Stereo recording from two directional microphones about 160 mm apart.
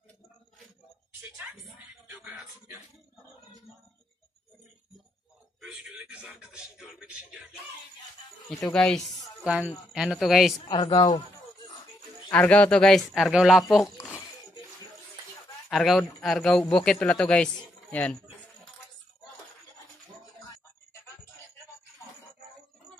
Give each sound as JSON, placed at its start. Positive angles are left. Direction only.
{"t": 2.0, "sound": "music", "side_deg": -10}
{"t": 5.6, "sound": "speech", "side_deg": -5}
{"t": 8.5, "sound": "speech", "side_deg": 5}
{"t": 10.7, "sound": "a man's voice", "side_deg": 30}
{"t": 12.3, "sound": "speech", "side_deg": 10}
{"t": 13.9, "sound": "a sound", "side_deg": 15}
{"t": 15.7, "sound": "speech", "side_deg": 0}